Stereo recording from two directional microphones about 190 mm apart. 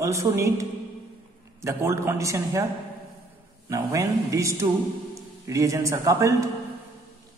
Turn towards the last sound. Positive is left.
turn(degrees=-15)  # may be behind; listen again after turning